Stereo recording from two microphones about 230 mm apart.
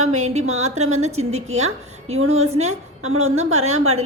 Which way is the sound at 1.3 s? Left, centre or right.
Right.